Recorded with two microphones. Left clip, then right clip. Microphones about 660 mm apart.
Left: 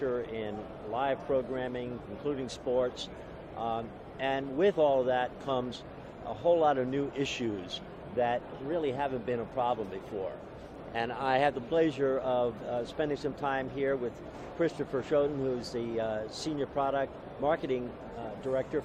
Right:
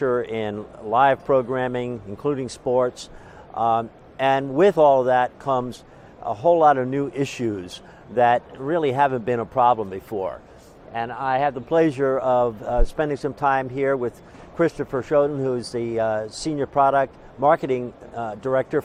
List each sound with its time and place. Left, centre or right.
0.0 s speech: right
10.9 s speech: right